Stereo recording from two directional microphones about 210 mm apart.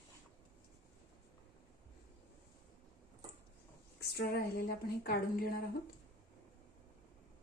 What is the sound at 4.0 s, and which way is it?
A woman's voice, 50° left (ahead or behind).